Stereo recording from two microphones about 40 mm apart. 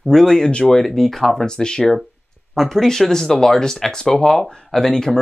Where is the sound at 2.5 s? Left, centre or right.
Centre.